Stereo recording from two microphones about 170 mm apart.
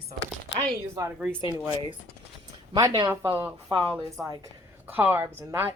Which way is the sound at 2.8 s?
25° right (ahead or behind).